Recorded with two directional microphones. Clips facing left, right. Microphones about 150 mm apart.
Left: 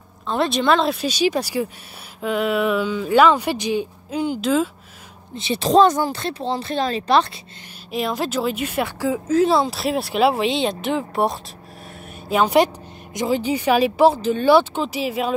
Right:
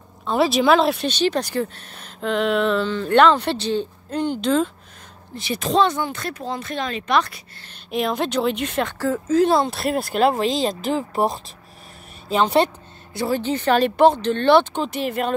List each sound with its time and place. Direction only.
0.3 s a woman's voice: centre (ahead or behind)
5.3 s speech: 25° left (ahead or behind)
5.7 s speech: 40° left (ahead or behind)
7.9 s a woman's voice: centre (ahead or behind)